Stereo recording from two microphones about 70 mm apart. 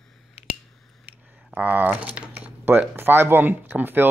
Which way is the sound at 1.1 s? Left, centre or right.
Right.